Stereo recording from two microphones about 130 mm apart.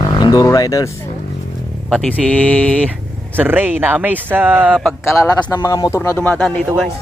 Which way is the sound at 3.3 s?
15° right (ahead or behind).